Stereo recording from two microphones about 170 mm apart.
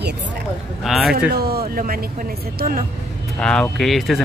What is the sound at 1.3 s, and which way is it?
A woman's voice, 65° right (ahead or behind).